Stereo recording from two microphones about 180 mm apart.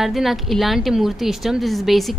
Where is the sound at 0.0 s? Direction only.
Centre (ahead or behind).